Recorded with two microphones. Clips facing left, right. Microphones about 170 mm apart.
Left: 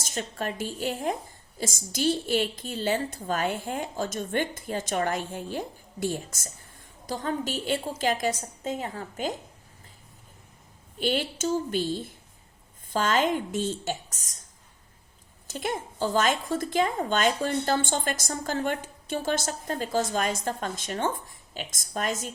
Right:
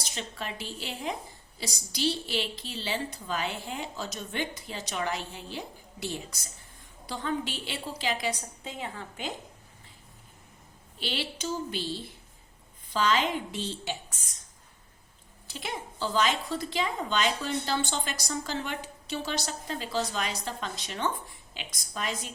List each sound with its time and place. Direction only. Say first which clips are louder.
0.0 s speech: left 6 dB; 50° left (ahead or behind)
11.0 s speech: left 7 dB; 50° left (ahead or behind)
15.4 s speech: left 6 dB; 45° left (ahead or behind)